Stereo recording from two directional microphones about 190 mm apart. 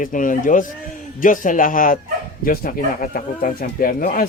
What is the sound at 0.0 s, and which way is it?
Speech, 45° left (ahead or behind).